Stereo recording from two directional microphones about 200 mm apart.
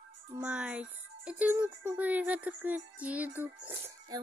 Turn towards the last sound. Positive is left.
turn(degrees=-10)  # may be behind; listen again after turning